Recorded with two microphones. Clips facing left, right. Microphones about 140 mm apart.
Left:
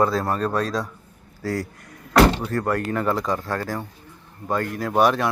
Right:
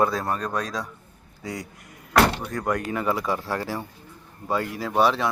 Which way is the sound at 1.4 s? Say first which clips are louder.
Left 7 dB; centre (ahead or behind).